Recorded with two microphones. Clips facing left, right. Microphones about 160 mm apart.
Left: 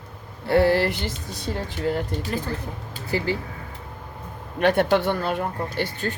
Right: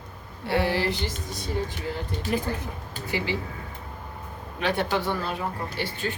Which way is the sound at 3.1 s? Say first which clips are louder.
Left 4 dB; 40° left (ahead or behind).